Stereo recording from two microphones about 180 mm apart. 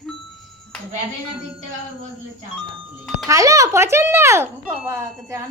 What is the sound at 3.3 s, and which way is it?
A child's voice, 20° right (ahead or behind).